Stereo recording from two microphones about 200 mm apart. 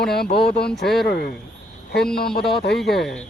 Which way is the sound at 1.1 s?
55° left (ahead or behind).